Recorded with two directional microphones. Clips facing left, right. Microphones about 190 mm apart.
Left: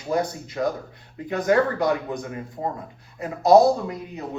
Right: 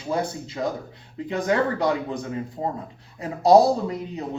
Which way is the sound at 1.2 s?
25° right (ahead or behind).